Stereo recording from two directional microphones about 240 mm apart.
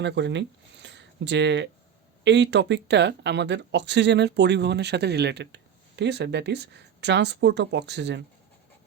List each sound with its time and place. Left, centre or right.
0.0 s speech: right